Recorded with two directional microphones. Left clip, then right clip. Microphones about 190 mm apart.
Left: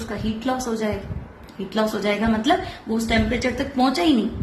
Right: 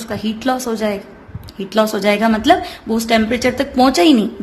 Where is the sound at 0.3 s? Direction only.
45° right (ahead or behind).